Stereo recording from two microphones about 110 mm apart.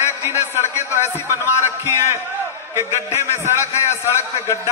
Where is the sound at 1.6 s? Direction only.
20° right (ahead or behind).